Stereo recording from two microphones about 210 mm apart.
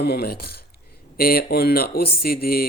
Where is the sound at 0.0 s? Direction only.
50° left (ahead or behind).